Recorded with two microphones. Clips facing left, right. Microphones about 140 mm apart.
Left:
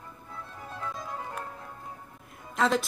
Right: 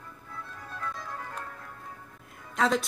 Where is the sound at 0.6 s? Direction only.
20° left (ahead or behind).